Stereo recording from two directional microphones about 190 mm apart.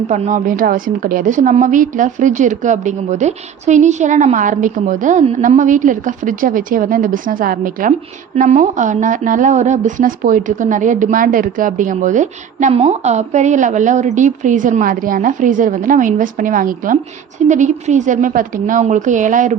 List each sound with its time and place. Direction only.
0.1 s a woman's voice: 40° right (ahead or behind)